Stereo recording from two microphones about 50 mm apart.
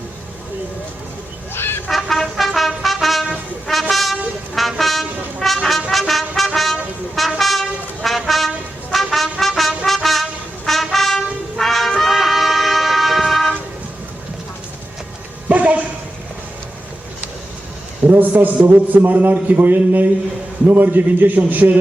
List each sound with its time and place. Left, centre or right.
1.5 s vehicle: left
1.9 s trumpet: centre
5.6 s brass instrument: centre
11.9 s music: centre
15.4 s a sound: right
18.1 s a man's voice: right